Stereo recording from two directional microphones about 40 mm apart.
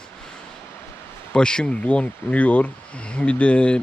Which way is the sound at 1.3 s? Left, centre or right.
Left.